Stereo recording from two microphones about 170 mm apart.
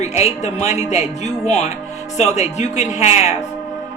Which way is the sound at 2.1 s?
40° left (ahead or behind).